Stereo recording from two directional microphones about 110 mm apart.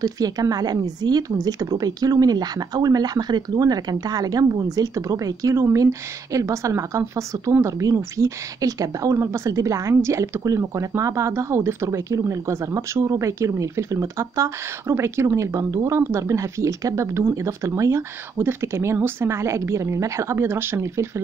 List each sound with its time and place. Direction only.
0.0 s a woman's voice: 35° right (ahead or behind)